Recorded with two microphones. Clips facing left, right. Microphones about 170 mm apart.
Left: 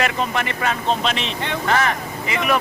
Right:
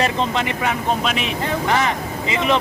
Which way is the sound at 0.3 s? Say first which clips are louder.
Right 1 dB; 15° right (ahead or behind).